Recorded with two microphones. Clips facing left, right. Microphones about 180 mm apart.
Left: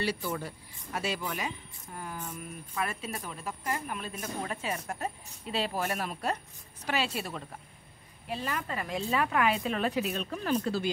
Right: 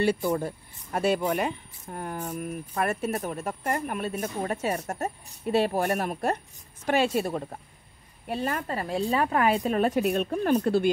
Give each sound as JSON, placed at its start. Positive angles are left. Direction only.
{"t": 0.0, "sound": "speech", "side_deg": -50}